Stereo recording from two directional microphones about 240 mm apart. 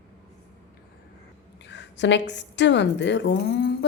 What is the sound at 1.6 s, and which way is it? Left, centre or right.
A woman's voice, left.